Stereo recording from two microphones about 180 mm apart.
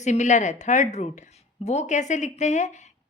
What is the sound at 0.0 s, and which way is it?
Speech, 40° left (ahead or behind).